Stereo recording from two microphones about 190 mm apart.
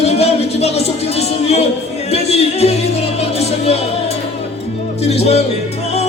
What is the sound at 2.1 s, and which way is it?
Music, 35° left (ahead or behind).